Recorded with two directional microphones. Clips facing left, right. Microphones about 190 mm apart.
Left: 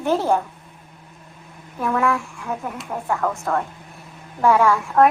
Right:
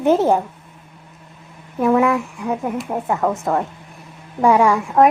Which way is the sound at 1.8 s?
20° right (ahead or behind).